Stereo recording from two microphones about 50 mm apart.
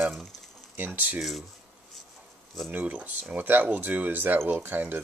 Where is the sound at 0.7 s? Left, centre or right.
Right.